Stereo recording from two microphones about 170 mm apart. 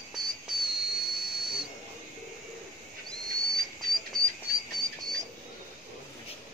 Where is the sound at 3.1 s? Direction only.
Centre (ahead or behind).